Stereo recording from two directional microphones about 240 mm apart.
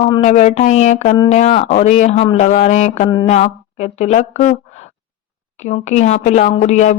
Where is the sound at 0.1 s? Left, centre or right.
Left.